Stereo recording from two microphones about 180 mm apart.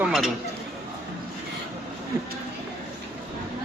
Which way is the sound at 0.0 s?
5° right (ahead or behind).